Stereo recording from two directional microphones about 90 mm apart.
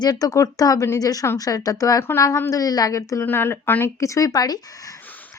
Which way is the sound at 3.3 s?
25° left (ahead or behind).